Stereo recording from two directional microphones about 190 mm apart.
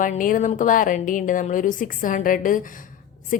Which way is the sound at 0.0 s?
45° left (ahead or behind).